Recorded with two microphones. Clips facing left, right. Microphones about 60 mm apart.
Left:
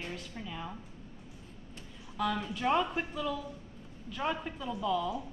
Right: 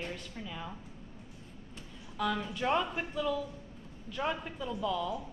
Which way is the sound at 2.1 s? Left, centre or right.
Centre.